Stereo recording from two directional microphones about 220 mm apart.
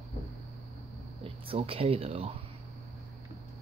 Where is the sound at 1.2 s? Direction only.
25° right (ahead or behind).